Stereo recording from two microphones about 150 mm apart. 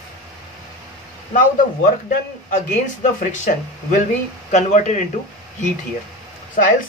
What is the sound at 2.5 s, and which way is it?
Speech, 55° left (ahead or behind).